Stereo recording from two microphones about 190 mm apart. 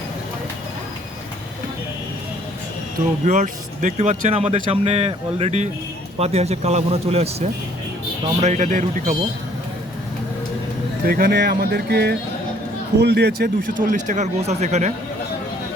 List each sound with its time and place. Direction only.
3.2 s speech: 40° right (ahead or behind)
11.1 s speech: 55° right (ahead or behind); by 14.9 s 35° right (ahead or behind)